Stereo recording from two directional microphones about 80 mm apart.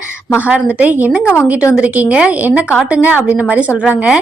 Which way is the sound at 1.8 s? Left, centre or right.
Centre.